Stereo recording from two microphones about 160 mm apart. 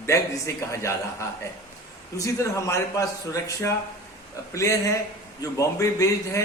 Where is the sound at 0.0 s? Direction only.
20° left (ahead or behind).